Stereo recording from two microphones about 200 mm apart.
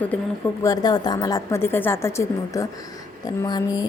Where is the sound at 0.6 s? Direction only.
20° left (ahead or behind).